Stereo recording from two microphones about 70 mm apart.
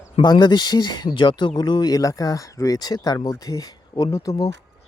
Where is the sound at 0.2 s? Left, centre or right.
Left.